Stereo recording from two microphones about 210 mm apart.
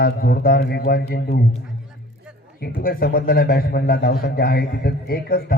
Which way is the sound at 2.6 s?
45° left (ahead or behind).